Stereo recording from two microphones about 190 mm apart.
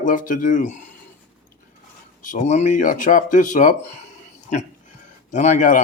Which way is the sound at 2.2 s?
45° left (ahead or behind).